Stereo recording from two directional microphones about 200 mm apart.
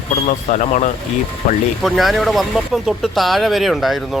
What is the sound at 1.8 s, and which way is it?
Speech, centre (ahead or behind).